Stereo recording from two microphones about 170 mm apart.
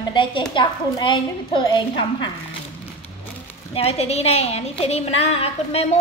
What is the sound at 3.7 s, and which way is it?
A woman's voice, 35° left (ahead or behind).